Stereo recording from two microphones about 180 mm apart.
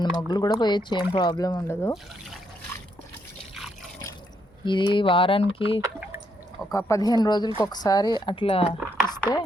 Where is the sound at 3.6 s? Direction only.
Centre (ahead or behind).